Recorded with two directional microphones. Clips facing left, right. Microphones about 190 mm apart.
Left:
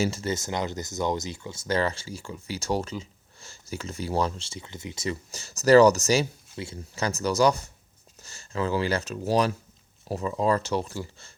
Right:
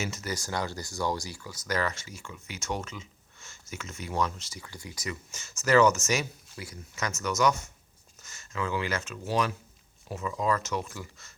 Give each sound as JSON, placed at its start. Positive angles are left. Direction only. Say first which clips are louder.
{"t": 0.0, "sound": "speech", "louder": "left 7 dB", "side_deg": 30}